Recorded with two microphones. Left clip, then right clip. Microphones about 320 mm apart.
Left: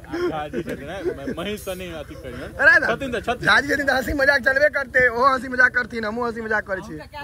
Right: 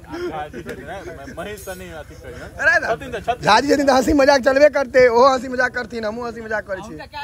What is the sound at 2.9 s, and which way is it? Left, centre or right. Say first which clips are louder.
Speech: right 2 dB; left.